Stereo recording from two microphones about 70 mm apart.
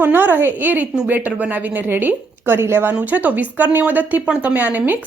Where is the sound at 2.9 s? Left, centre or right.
Right.